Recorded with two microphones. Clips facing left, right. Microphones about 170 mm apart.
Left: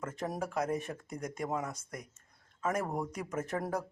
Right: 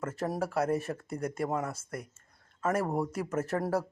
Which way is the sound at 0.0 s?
5° right (ahead or behind).